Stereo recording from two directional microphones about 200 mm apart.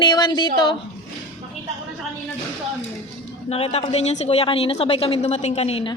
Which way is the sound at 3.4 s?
30° left (ahead or behind).